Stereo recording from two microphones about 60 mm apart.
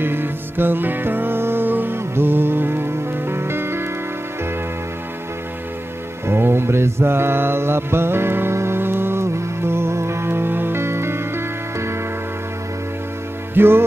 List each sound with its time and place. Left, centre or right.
0.0 s music: right
6.2 s mantra: right
13.6 s music: right